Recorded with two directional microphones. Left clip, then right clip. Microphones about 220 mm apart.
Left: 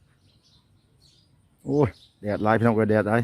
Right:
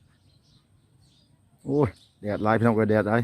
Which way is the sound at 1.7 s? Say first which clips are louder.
Left 1 dB; 10° left (ahead or behind).